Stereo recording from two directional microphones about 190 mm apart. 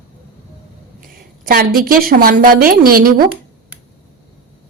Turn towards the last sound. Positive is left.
turn(degrees=-50)  # may be behind; listen again after turning